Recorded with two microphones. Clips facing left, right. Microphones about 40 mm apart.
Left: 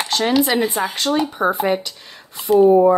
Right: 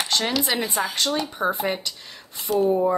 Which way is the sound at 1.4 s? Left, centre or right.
Left.